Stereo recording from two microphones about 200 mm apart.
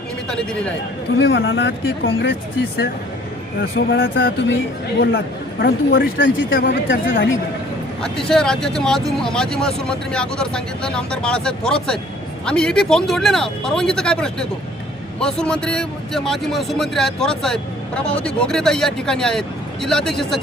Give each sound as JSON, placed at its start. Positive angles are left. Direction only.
{"t": 1.2, "sound": "speech", "side_deg": 65}
{"t": 3.6, "sound": "speech", "side_deg": 50}
{"t": 3.9, "sound": "speech", "side_deg": 70}
{"t": 4.3, "sound": "speech", "side_deg": 60}
{"t": 7.1, "sound": "speech", "side_deg": 75}
{"t": 8.3, "sound": "speech", "side_deg": 5}